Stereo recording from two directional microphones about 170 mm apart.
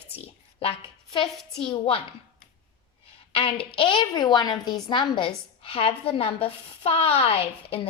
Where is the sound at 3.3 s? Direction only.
35° left (ahead or behind).